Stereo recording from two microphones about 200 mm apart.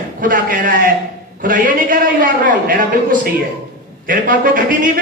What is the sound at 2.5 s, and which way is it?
A man's voice, 45° right (ahead or behind).